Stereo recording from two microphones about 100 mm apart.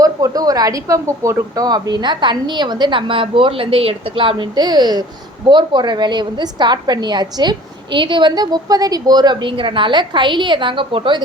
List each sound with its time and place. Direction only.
0.0 s a woman's voice: 35° right (ahead or behind); by 11.2 s 55° right (ahead or behind)